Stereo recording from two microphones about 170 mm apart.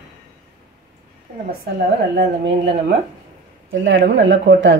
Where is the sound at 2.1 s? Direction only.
90° right.